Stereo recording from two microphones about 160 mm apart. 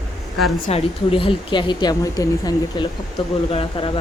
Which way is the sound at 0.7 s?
35° left (ahead or behind).